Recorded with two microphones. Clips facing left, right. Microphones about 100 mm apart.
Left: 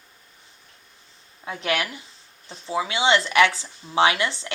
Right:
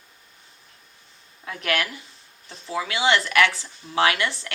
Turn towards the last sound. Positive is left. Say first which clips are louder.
# left 1 dB
turn(degrees=25)  # may be behind; listen again after turning